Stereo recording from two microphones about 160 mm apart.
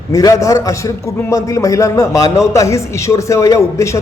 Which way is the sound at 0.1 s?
20° left (ahead or behind).